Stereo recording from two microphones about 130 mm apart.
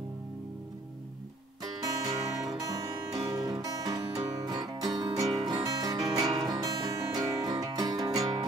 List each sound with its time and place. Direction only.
1.6 s music: 30° right (ahead or behind)